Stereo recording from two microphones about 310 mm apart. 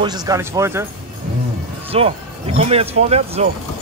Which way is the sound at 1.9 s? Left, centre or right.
Centre.